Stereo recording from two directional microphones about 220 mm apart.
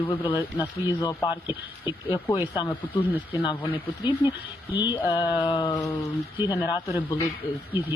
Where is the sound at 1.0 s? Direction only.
20° left (ahead or behind).